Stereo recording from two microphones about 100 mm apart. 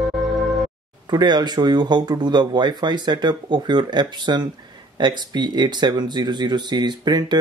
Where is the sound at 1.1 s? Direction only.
45° right (ahead or behind).